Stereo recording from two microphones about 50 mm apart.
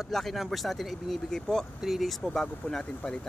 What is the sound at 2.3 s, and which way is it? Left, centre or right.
Speech, centre.